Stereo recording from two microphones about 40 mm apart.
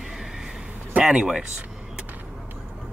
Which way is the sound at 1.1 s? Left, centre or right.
Centre.